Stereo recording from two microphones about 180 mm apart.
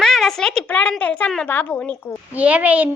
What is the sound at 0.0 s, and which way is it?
A woman's voice, centre (ahead or behind).